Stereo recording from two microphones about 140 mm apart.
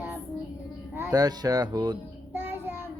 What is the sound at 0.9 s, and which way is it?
Speech, 20° right (ahead or behind).